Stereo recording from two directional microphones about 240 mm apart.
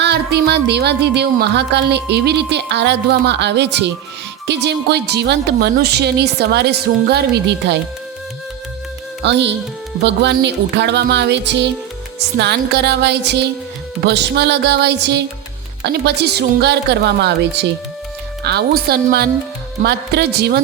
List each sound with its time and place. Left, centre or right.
0.0 s speech: right
9.2 s speech: right